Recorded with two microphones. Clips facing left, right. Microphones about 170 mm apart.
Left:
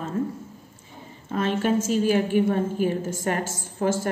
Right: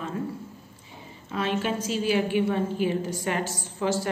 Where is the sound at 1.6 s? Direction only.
45° left (ahead or behind).